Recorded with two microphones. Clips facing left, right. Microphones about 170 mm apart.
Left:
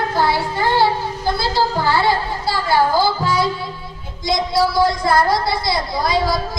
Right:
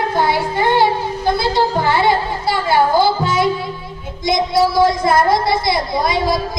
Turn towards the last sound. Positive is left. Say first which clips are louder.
# right 2 dB
turn(degrees=-20)  # may be behind; listen again after turning